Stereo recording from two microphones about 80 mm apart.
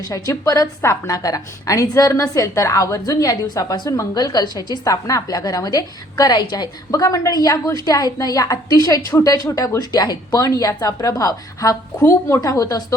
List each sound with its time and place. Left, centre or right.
0.0 s a woman's voice: left